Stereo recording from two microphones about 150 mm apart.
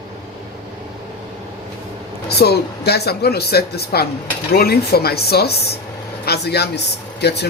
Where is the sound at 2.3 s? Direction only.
90° left.